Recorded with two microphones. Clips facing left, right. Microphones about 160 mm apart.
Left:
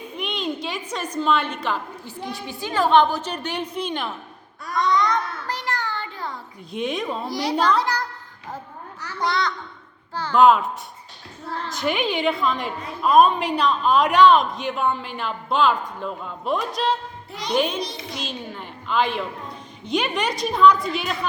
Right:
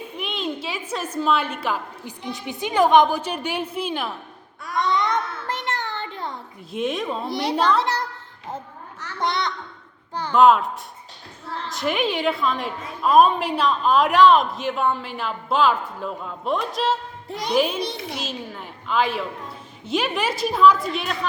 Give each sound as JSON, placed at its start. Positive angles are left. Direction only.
{"t": 0.2, "sound": "a sound", "side_deg": 0}
{"t": 2.3, "sound": "a woman's voice", "side_deg": -20}
{"t": 4.8, "sound": "a sound", "side_deg": -25}
{"t": 6.7, "sound": "a woman's voice", "side_deg": 0}
{"t": 7.3, "sound": "a woman's voice", "side_deg": -25}
{"t": 7.5, "sound": "a woman's voice", "side_deg": 0}
{"t": 7.8, "sound": "a woman's voice", "side_deg": -25}
{"t": 9.1, "sound": "a child's voice", "side_deg": -20}
{"t": 10.3, "sound": "a woman's voice", "side_deg": 0}
{"t": 11.7, "sound": "a woman's voice", "side_deg": 0}